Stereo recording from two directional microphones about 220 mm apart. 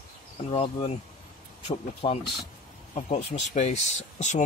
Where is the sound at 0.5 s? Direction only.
25° left (ahead or behind).